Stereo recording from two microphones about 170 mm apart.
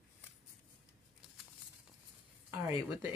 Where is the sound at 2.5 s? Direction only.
20° right (ahead or behind).